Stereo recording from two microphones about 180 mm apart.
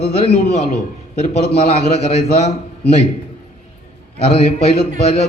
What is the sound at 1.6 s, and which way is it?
Speech, 35° left (ahead or behind).